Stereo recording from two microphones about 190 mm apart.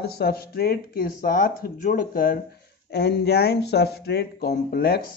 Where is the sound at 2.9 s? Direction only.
60° left (ahead or behind).